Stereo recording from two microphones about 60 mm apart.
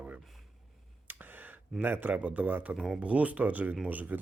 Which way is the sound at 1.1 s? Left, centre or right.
Right.